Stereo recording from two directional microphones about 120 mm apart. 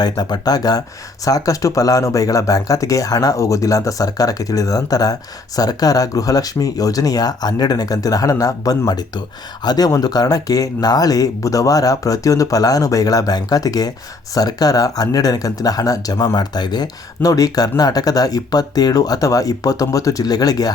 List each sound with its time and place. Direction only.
0.0 s speech: 35° left (ahead or behind)